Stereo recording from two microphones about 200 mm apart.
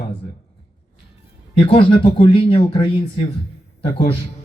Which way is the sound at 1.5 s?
25° left (ahead or behind).